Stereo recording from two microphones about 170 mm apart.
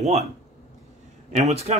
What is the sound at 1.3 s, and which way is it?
Speech, 45° right (ahead or behind).